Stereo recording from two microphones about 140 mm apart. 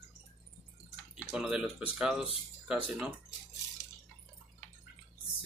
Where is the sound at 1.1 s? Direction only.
5° right (ahead or behind).